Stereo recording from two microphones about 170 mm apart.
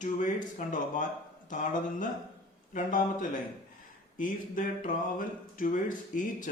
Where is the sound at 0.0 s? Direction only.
50° left (ahead or behind).